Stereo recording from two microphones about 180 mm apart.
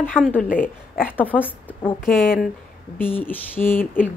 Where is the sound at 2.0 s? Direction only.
50° left (ahead or behind).